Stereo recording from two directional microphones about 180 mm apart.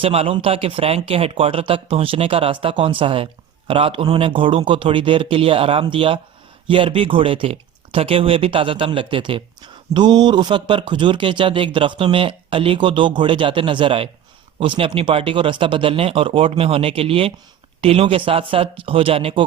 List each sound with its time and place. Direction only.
0.0 s speech: 35° right (ahead or behind)